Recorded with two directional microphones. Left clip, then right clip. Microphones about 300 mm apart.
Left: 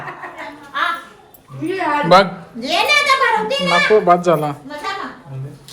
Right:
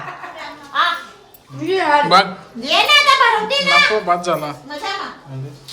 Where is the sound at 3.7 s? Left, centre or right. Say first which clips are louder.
Left 2 dB; centre.